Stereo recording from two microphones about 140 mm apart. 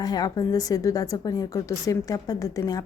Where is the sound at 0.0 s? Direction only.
30° left (ahead or behind).